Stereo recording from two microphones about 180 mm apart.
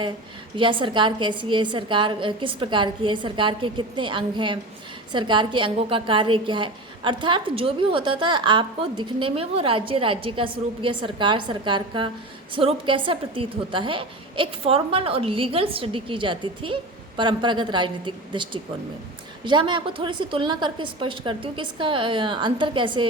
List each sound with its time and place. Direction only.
0.5 s a woman's voice: 30° right (ahead or behind)